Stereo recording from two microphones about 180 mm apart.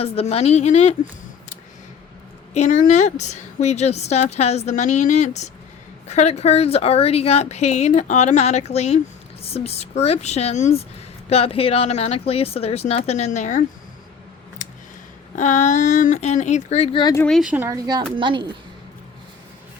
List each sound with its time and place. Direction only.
0.0 s a woman's voice: 35° left (ahead or behind)
2.5 s a woman's voice: 40° left (ahead or behind)
14.6 s a sound: 45° left (ahead or behind)
15.4 s a woman's voice: 45° left (ahead or behind)
17.0 s speech: 20° left (ahead or behind)
17.2 s speech: centre (ahead or behind)
17.6 s a woman's voice: 20° right (ahead or behind)